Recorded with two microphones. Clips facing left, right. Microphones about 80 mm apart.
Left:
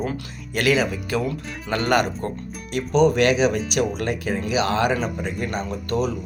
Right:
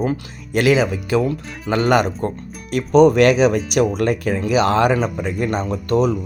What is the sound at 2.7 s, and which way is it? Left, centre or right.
Speech, right.